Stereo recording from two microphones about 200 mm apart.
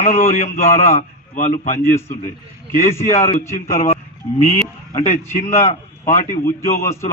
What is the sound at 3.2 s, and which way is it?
Speech, 30° left (ahead or behind).